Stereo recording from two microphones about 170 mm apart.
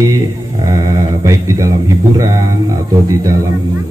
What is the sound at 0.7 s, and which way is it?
Speech, 20° right (ahead or behind).